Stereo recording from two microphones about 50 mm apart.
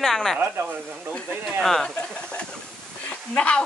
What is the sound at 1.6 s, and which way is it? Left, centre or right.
Speech, centre.